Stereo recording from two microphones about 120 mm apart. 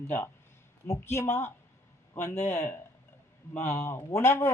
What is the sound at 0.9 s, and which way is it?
Speech, 20° left (ahead or behind).